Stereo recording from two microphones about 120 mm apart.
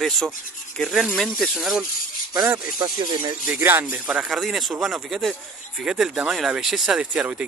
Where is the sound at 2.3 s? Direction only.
30° right (ahead or behind).